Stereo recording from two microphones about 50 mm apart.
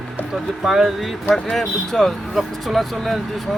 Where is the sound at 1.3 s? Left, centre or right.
Centre.